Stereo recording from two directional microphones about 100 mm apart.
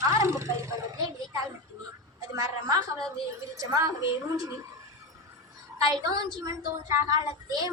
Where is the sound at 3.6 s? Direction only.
30° right (ahead or behind).